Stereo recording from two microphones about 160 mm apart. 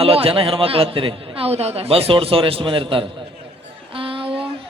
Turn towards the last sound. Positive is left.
turn(degrees=-35)  # may be behind; listen again after turning